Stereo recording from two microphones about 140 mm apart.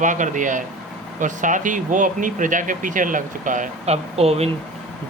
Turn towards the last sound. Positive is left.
turn(degrees=-45)  # may be behind; listen again after turning